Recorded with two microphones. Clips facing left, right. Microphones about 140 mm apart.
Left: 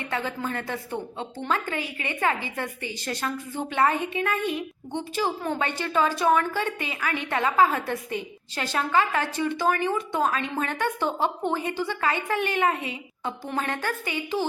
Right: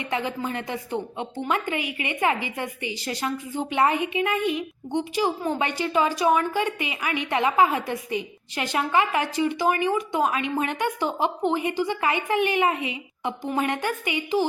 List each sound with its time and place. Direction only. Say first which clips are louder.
0.0 s a woman's voice: right 2 dB; 15° right (ahead or behind)